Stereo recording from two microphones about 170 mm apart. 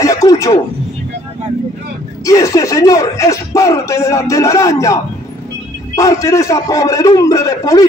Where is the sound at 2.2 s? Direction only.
20° left (ahead or behind).